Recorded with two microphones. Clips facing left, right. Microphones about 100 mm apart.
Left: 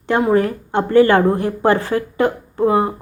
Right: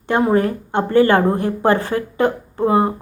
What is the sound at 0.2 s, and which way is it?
A woman's voice, 30° right (ahead or behind).